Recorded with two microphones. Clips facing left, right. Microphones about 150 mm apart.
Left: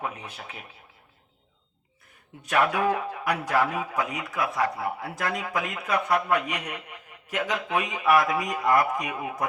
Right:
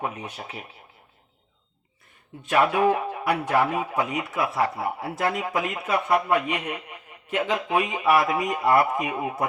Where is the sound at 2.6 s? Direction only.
20° right (ahead or behind).